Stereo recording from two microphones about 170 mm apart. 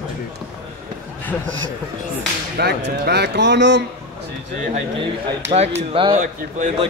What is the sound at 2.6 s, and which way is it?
A man's voice, 75° right (ahead or behind).